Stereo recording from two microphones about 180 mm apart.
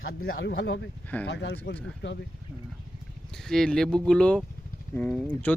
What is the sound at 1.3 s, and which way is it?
Speech, 70° left (ahead or behind).